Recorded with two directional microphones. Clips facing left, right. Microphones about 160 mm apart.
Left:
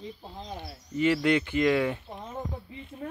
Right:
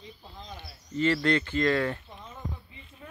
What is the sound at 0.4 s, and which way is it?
Speech, 40° left (ahead or behind).